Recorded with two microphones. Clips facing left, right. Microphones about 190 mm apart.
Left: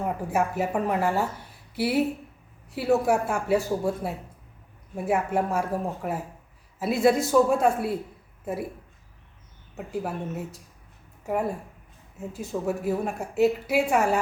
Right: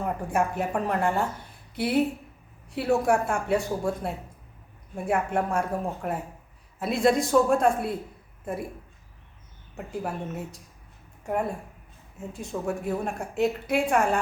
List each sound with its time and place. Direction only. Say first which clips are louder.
0.0 s a woman's voice: even; 5° left (ahead or behind)
9.7 s a woman's voice: left 1 dB; centre (ahead or behind)
12.3 s a woman's voice: left 2 dB; 5° left (ahead or behind)